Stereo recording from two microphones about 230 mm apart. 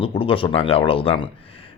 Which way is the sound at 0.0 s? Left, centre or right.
Left.